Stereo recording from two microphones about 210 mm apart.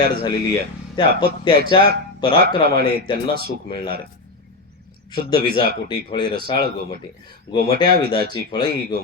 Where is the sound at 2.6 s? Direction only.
50° right (ahead or behind).